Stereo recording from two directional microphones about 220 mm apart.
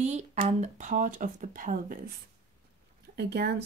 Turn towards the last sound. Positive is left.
turn(degrees=-50)  # may be behind; listen again after turning